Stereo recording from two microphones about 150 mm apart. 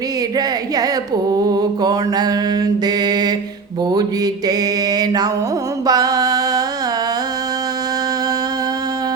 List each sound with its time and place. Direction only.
0.3 s mantra: 25° right (ahead or behind)